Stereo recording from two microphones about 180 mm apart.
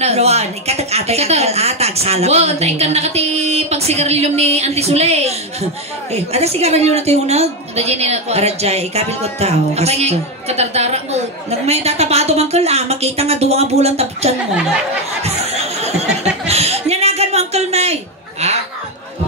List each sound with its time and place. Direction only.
0.0 s a woman's voice: 35° right (ahead or behind)
15.2 s chatter: 35° right (ahead or behind)
16.4 s chuckle: 35° right (ahead or behind)